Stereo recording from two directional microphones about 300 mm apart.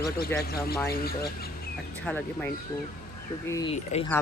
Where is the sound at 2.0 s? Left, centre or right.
Centre.